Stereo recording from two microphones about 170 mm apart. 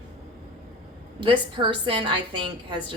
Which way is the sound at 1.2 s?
30° right (ahead or behind).